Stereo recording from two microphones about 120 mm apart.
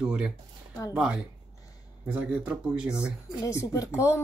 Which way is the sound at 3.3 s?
25° left (ahead or behind).